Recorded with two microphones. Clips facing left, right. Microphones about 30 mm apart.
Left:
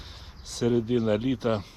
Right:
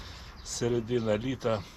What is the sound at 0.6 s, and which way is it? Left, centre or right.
Speech, left.